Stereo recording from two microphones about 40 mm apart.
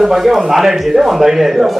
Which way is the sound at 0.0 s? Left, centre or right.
Centre.